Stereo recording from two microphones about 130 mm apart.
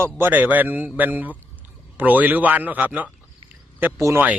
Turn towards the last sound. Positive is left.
turn(degrees=-20)  # may be behind; listen again after turning